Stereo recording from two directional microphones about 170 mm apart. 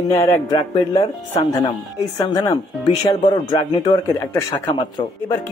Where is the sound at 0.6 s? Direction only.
35° left (ahead or behind).